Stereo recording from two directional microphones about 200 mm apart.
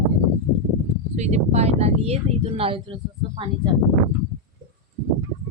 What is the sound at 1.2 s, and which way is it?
Speech, 35° right (ahead or behind).